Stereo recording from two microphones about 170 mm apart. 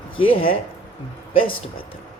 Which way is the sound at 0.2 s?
30° left (ahead or behind).